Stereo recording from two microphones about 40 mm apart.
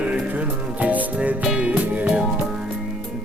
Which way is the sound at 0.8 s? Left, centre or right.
Right.